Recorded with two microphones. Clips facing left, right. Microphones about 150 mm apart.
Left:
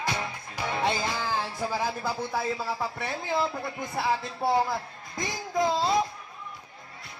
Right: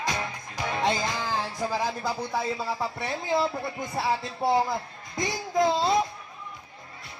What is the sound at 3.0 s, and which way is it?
A man's voice, 20° right (ahead or behind).